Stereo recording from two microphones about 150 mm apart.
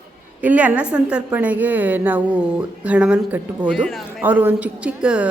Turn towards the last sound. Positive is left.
turn(degrees=-5)  # may be behind; listen again after turning